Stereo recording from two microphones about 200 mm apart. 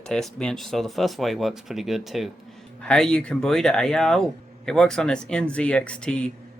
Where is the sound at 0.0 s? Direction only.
5° left (ahead or behind).